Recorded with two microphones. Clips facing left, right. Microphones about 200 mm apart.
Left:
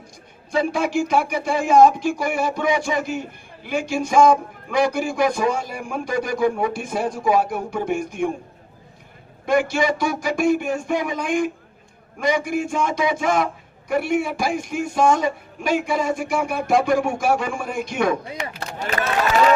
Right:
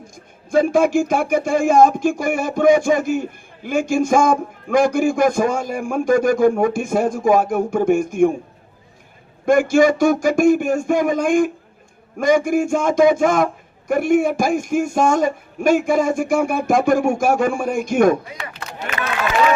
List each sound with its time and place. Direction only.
0.5 s speech: 50° right (ahead or behind)
9.5 s speech: 45° right (ahead or behind)
18.8 s speech: 35° left (ahead or behind)